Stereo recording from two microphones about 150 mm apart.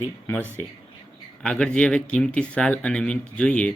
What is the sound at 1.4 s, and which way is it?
Speech, 10° left (ahead or behind).